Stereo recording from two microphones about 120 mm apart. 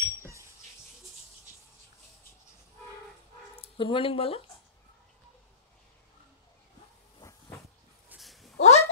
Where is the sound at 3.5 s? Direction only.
50° left (ahead or behind).